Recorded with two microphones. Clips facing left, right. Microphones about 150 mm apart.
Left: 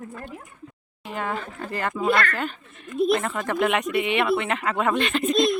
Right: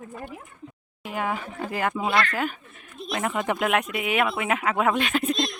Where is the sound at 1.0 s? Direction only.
10° right (ahead or behind).